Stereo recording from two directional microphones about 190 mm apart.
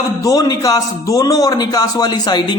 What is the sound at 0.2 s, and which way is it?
A man's voice, 20° left (ahead or behind).